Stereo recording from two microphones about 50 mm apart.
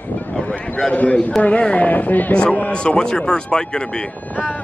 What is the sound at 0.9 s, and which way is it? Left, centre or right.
A man's voice, left.